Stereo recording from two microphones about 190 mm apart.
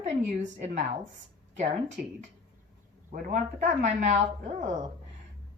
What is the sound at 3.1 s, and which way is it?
Speech, 45° right (ahead or behind).